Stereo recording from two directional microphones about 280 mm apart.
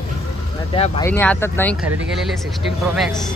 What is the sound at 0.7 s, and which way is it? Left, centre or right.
Speech, centre.